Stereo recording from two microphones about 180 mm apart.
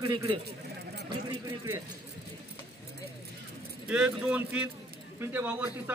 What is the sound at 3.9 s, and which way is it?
A man's voice, 5° right (ahead or behind).